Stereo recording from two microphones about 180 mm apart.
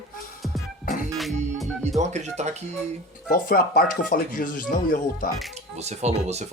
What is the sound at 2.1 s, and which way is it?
Speech, 40° right (ahead or behind).